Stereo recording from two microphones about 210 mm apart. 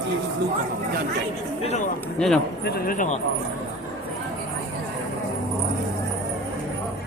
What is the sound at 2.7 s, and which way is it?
Speech, 45° left (ahead or behind).